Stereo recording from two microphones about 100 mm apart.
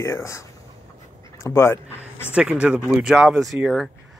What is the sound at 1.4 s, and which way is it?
Speech, 25° left (ahead or behind).